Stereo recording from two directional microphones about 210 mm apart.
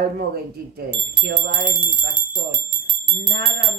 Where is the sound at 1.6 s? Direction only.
40° right (ahead or behind).